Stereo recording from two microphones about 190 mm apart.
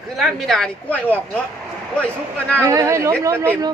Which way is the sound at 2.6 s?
15° right (ahead or behind).